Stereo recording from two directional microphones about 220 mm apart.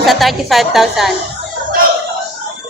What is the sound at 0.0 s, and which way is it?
A woman's voice, centre (ahead or behind).